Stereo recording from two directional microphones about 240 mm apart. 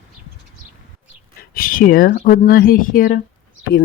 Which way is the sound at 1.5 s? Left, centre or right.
Left.